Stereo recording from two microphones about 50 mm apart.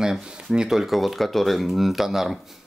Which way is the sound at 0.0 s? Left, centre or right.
Centre.